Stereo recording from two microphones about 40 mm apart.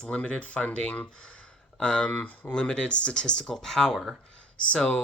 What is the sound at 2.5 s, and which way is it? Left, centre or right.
Speech, left.